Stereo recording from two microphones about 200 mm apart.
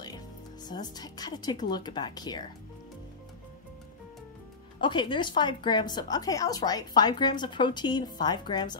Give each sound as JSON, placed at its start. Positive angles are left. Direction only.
{"t": 0.7, "sound": "a woman's voice", "side_deg": 20}
{"t": 4.7, "sound": "a woman's voice", "side_deg": 25}